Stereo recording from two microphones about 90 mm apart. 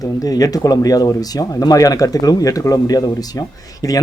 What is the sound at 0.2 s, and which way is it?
Speech, 40° left (ahead or behind).